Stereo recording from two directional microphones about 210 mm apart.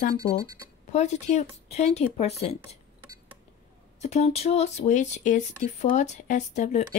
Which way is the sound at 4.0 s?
30° left (ahead or behind).